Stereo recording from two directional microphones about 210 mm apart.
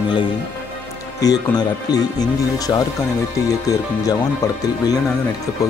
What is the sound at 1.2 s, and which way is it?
Speech, 20° left (ahead or behind).